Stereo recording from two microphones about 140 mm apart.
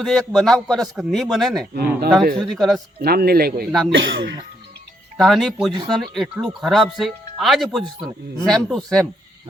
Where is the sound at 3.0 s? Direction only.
90° right.